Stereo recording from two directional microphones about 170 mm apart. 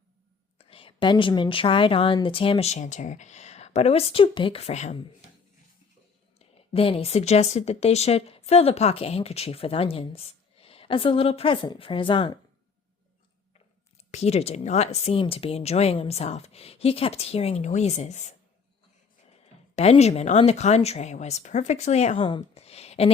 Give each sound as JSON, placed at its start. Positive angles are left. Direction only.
{"t": 0.6, "sound": "speech", "side_deg": 30}
{"t": 6.4, "sound": "speech", "side_deg": 35}
{"t": 14.1, "sound": "speech", "side_deg": 40}
{"t": 19.7, "sound": "speech", "side_deg": 40}
{"t": 22.2, "sound": "speech", "side_deg": 30}